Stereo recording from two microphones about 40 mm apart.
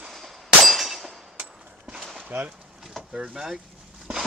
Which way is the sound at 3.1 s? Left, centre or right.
Right.